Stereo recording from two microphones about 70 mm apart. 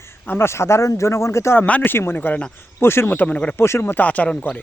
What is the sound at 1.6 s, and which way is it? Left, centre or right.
Speech, left.